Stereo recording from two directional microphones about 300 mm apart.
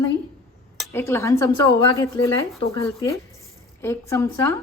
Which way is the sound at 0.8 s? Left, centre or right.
Centre.